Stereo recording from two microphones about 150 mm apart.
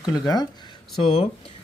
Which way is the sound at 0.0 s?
25° left (ahead or behind).